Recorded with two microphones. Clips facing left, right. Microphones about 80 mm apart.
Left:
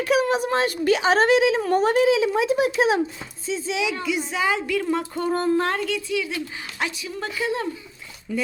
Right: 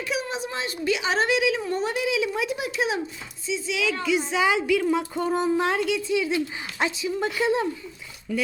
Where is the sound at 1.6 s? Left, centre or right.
Left.